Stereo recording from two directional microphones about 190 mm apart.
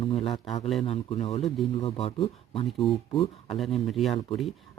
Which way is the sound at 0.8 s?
35° left (ahead or behind).